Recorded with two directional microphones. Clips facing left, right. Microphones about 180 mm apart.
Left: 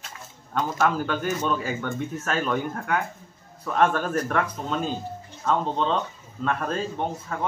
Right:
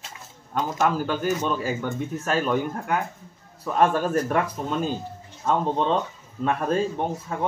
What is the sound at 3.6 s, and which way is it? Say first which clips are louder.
Speech: right 1 dB; 10° right (ahead or behind).